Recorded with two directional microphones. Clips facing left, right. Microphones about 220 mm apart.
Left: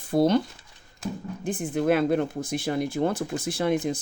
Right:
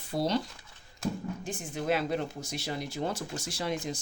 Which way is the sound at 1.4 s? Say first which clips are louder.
Left 9 dB; 55° left (ahead or behind).